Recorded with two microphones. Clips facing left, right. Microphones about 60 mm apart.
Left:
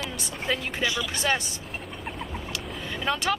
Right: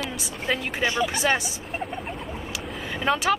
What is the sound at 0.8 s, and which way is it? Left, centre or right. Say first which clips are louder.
Speech: right 6 dB; right.